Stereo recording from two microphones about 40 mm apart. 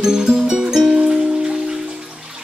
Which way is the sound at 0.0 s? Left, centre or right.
Centre.